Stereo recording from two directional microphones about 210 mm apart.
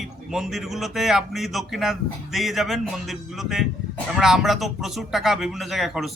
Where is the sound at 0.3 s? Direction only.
Centre (ahead or behind).